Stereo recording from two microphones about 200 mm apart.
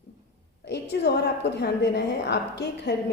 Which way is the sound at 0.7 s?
55° left (ahead or behind).